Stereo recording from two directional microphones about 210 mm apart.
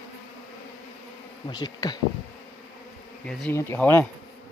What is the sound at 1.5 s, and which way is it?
Bee, 20° left (ahead or behind).